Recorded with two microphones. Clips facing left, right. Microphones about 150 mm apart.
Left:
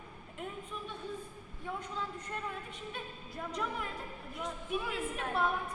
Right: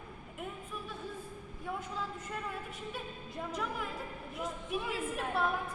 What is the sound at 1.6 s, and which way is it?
A woman's voice, 5° right (ahead or behind).